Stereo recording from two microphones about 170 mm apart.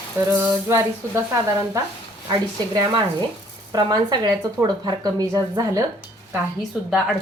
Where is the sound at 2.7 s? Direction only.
25° right (ahead or behind).